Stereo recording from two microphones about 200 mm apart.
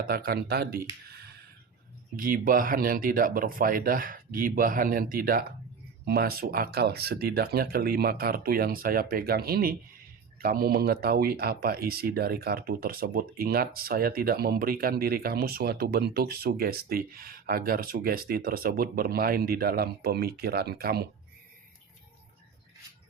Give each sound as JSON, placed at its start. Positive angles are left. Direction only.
{"t": 0.0, "sound": "speech", "side_deg": -50}
{"t": 1.1, "sound": "a sound", "side_deg": -50}
{"t": 2.1, "sound": "speech", "side_deg": -45}